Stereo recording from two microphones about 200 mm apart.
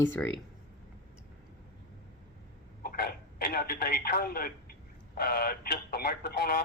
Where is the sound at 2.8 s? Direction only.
50° left (ahead or behind).